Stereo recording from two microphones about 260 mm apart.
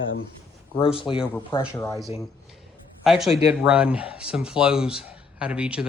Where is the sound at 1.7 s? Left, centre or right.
Centre.